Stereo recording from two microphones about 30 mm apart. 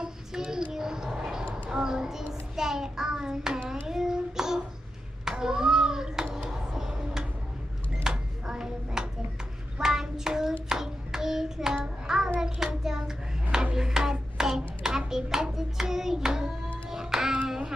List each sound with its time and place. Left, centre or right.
0.0 s a sound: right
1.5 s child singing: right
5.3 s a sound: right
9.8 s hands: centre
11.7 s child singing: right
12.4 s hands: right
13.7 s a sound: centre
14.4 s hands: right
15.5 s child singing: centre
16.9 s music: centre